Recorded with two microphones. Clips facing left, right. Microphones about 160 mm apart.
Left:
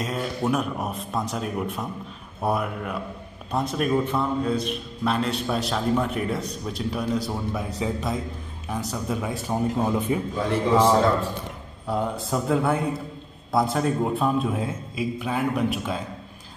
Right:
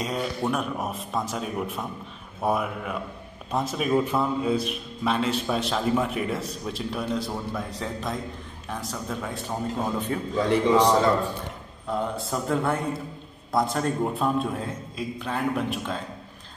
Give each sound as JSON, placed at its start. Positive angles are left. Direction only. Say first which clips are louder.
{"t": 0.0, "sound": "a man's voice", "louder": "left 1 dB", "side_deg": 0}